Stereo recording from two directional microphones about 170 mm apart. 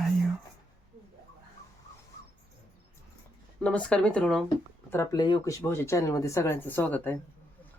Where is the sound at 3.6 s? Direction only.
5° left (ahead or behind).